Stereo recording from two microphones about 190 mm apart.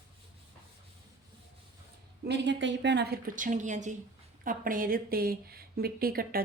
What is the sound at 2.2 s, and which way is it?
A woman's voice, 65° right (ahead or behind).